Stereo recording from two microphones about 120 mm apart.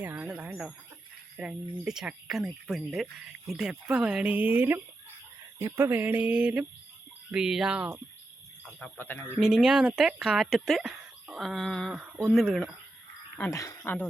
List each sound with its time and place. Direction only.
0.0 s a sound: 15° right (ahead or behind)
1.4 s speech: 5° right (ahead or behind)
8.8 s a man's voice: 15° left (ahead or behind)
9.4 s speech: 5° right (ahead or behind)
13.5 s speech: 30° left (ahead or behind)
13.8 s a man's voice: 15° left (ahead or behind)